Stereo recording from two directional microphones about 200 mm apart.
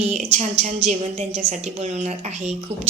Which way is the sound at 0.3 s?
35° right (ahead or behind).